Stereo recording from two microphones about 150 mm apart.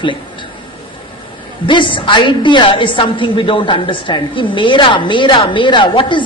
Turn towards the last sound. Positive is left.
turn(degrees=35)  # may be behind; listen again after turning